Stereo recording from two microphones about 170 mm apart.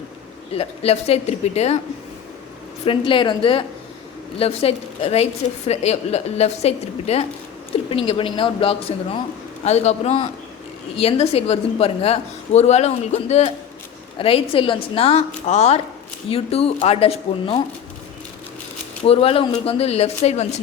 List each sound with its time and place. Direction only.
0.5 s a woman's voice: 35° left (ahead or behind)
2.8 s a woman's voice: 30° left (ahead or behind)
19.0 s a woman's voice: 35° left (ahead or behind)